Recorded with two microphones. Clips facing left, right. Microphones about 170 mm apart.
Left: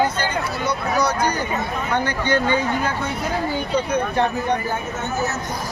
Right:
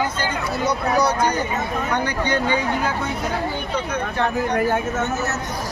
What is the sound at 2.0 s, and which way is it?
Speech, 15° right (ahead or behind).